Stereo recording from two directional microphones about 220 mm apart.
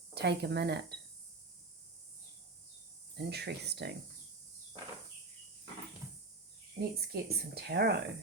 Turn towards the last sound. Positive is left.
turn(degrees=-45)  # may be behind; listen again after turning